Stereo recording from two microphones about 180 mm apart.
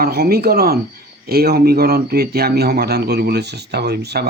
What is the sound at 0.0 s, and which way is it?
Speech, 60° right (ahead or behind).